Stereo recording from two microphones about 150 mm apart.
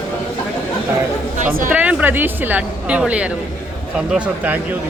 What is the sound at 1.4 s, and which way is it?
Speech, 60° right (ahead or behind).